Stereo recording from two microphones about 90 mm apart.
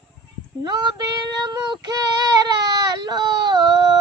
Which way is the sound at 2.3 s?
50° right (ahead or behind).